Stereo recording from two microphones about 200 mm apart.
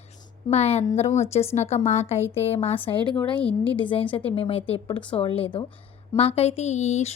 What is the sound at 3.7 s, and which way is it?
A woman's voice, 25° left (ahead or behind).